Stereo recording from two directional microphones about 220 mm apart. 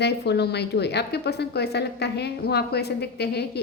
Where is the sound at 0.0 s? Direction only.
50° left (ahead or behind).